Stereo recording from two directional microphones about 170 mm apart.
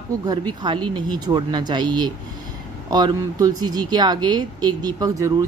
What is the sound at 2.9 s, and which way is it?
A man's voice, 25° right (ahead or behind).